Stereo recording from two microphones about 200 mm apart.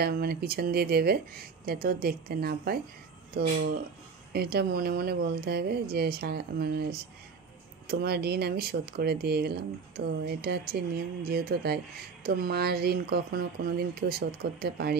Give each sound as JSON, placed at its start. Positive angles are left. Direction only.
{"t": 0.0, "sound": "speech", "side_deg": -50}